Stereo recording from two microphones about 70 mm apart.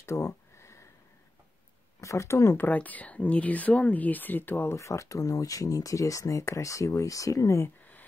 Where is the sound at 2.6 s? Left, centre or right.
Left.